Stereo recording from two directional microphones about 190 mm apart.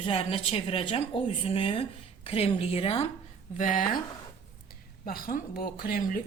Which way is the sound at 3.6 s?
45° left (ahead or behind).